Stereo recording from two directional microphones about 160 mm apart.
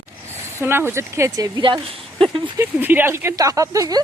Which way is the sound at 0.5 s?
15° right (ahead or behind).